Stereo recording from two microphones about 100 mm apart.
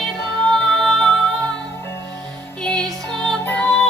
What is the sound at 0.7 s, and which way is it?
Music, 5° left (ahead or behind).